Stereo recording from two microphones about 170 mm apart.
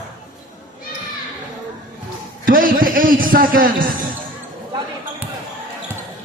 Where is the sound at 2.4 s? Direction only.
55° right (ahead or behind).